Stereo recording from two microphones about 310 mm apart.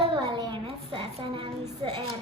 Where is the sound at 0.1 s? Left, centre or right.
Centre.